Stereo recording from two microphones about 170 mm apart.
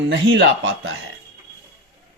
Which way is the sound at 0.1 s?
90° right.